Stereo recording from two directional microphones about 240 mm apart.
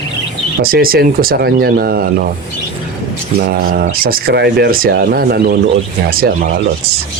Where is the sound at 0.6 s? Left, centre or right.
Right.